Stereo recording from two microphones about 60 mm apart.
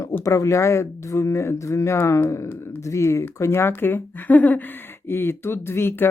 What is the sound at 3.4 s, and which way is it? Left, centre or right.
Speech, left.